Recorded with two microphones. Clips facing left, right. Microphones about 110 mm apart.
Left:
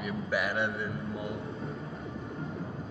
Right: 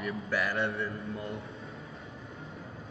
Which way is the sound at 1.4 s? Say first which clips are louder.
Left 6 dB; 30° left (ahead or behind).